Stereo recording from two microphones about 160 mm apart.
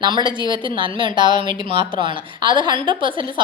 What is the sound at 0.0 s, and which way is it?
A woman's voice, 30° right (ahead or behind).